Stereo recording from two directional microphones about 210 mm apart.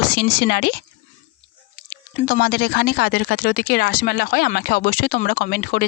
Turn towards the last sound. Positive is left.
turn(degrees=45)  # may be behind; listen again after turning